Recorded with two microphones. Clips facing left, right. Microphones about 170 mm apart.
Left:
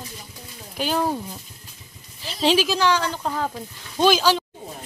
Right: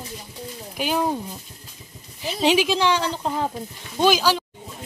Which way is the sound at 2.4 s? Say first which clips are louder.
Even; 15° right (ahead or behind).